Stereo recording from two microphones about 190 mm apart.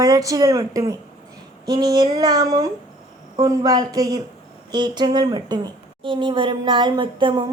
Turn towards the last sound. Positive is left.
turn(degrees=-25)  # may be behind; listen again after turning